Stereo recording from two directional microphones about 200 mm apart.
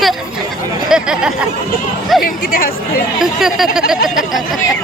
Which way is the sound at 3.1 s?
Centre (ahead or behind).